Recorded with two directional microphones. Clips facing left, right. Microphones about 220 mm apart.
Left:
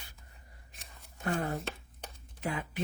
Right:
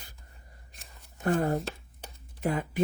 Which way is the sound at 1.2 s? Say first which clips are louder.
Right 6 dB; 45° right (ahead or behind).